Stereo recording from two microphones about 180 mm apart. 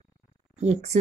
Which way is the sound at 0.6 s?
40° right (ahead or behind).